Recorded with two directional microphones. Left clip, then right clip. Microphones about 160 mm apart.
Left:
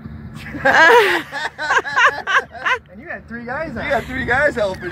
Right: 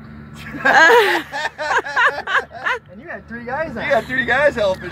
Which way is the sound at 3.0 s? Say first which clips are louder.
Left 1 dB; 30° right (ahead or behind).